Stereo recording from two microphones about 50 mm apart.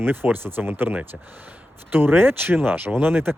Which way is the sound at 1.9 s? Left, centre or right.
Right.